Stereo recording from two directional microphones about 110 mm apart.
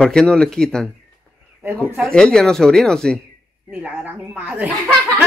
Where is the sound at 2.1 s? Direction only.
5° left (ahead or behind).